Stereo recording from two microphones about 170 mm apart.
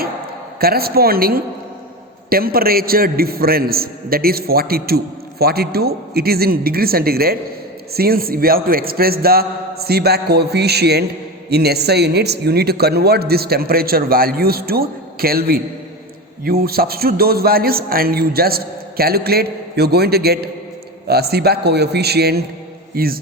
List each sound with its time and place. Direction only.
0.6 s a man's voice: 65° right (ahead or behind)